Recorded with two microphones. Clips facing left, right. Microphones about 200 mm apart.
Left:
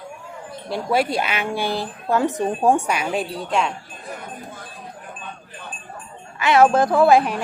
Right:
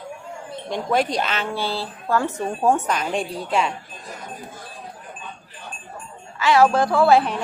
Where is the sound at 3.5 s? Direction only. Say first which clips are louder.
Even; centre (ahead or behind).